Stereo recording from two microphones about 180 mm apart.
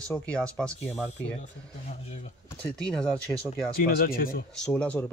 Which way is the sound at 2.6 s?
5° left (ahead or behind).